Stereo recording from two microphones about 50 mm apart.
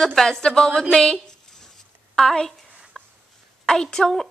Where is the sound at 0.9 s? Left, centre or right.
Centre.